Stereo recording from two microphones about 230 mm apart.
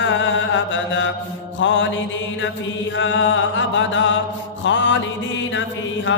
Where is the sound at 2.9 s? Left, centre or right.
Left.